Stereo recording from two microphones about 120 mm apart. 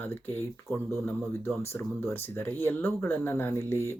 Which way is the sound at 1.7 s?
20° left (ahead or behind).